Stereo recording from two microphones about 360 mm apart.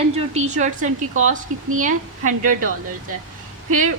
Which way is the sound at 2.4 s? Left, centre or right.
Right.